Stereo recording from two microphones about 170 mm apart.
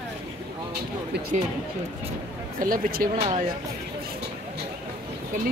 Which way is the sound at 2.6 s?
60° right (ahead or behind).